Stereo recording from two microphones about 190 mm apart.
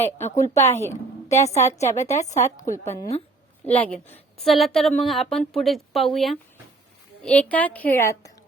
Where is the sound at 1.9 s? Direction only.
15° left (ahead or behind).